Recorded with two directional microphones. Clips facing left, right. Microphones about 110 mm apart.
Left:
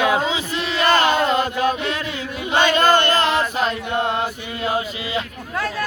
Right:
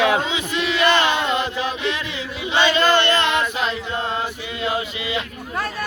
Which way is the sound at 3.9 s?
60° left (ahead or behind).